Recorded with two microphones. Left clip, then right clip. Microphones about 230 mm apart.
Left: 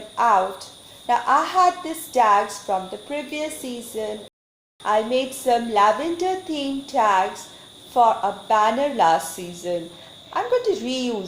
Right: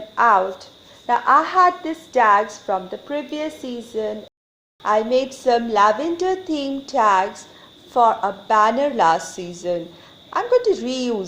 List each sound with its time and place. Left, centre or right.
0.2 s a woman's voice: right